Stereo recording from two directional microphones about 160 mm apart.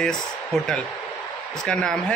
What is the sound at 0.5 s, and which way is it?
A man's voice, centre (ahead or behind).